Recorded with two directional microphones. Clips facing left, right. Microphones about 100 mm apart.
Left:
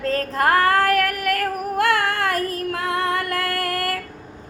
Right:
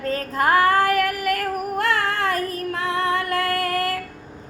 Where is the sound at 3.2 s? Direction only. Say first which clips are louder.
Right 2 dB; 25° right (ahead or behind).